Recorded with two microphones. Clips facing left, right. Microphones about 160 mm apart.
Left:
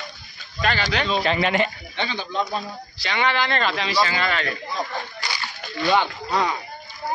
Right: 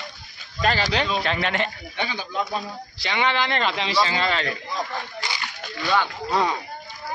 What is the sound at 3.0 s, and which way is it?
Speech, 20° right (ahead or behind).